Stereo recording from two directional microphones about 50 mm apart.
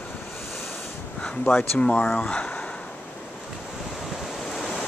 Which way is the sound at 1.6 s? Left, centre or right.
Left.